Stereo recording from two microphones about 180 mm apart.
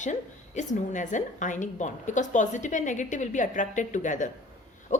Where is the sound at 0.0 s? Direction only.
40° left (ahead or behind).